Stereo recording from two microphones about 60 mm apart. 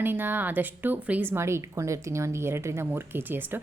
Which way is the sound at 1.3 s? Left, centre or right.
Right.